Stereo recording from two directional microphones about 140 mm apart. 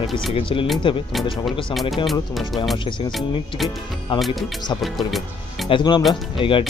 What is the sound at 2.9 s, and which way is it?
Speech, 35° left (ahead or behind).